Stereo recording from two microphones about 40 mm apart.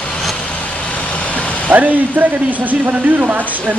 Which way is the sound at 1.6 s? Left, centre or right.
Right.